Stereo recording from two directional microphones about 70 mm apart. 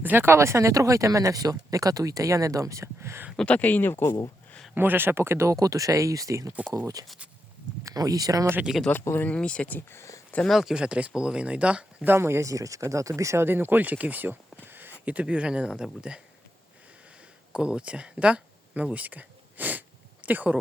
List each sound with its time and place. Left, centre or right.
0.0 s speech: right
3.3 s speech: centre
4.7 s speech: right
8.7 s speech: centre
9.0 s speech: left
9.3 s speech: centre
9.7 s speech: left
10.4 s speech: centre
10.8 s speech: centre
12.0 s speech: right
12.5 s speech: right
13.4 s speech: right
15.0 s speech: centre
17.5 s speech: centre